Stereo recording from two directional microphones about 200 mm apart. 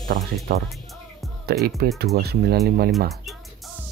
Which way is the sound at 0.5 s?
50° right (ahead or behind).